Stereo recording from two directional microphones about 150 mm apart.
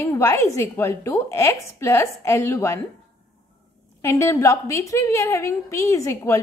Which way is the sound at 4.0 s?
20° left (ahead or behind).